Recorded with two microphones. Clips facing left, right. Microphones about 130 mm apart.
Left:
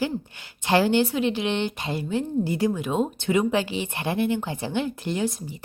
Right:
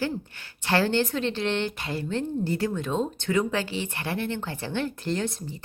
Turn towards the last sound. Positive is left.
turn(degrees=10)  # may be behind; listen again after turning